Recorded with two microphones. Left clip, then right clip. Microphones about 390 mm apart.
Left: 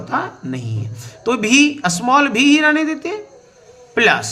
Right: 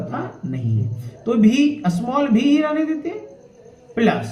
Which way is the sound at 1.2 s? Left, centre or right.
Left.